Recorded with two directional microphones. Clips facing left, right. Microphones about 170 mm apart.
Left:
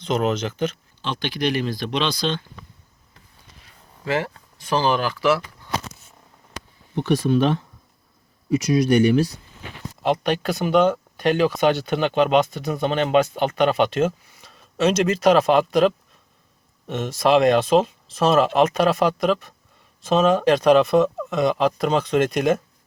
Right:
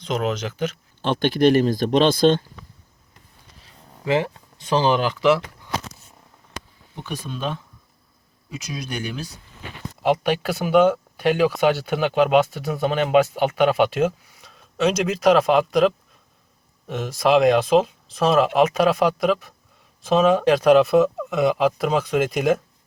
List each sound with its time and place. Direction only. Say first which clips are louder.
0.0 s speech: left 2 dB; centre (ahead or behind)
1.0 s speech: right 7 dB; 50° right (ahead or behind)
4.0 s speech: right 3 dB; 20° right (ahead or behind)
6.9 s speech: left 13 dB; 75° left (ahead or behind)
10.0 s speech: right 1 dB; 10° right (ahead or behind)